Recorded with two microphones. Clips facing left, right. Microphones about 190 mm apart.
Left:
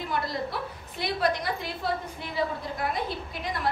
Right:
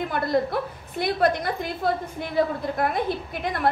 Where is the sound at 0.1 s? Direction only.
55° right (ahead or behind).